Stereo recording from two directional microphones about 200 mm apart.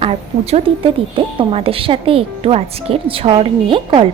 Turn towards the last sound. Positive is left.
turn(degrees=-25)  # may be behind; listen again after turning